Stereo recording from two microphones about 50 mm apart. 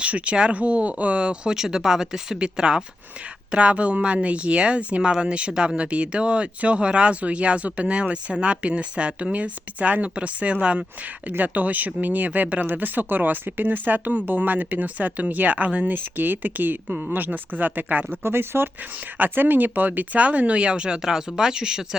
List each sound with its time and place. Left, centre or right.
0.0 s speech: right
11.3 s speech: right
19.1 s speech: right; by 21.8 s centre